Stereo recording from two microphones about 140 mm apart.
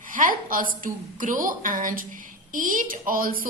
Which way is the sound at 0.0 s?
75° right (ahead or behind).